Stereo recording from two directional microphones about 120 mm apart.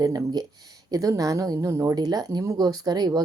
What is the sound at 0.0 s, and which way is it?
A woman's voice, 30° right (ahead or behind).